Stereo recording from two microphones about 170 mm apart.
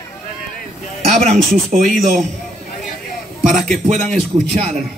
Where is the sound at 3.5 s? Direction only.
45° right (ahead or behind).